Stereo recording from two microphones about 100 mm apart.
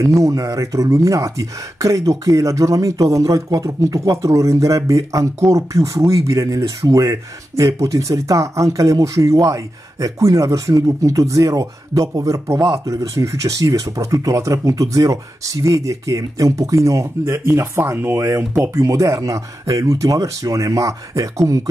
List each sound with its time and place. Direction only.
0.0 s speech: 30° right (ahead or behind)